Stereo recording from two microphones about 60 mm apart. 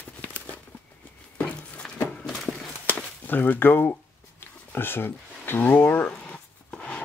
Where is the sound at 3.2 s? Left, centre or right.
Left.